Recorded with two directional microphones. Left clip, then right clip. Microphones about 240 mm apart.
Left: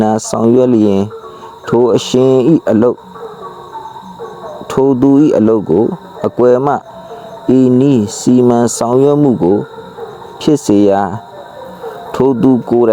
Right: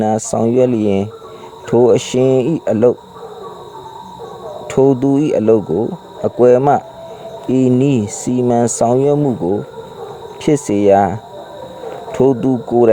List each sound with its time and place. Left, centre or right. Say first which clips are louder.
0.0 s speech: left 3 dB; left
4.9 s speech: left 5 dB; left